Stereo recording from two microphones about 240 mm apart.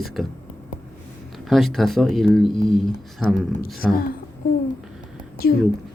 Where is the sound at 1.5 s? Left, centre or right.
Centre.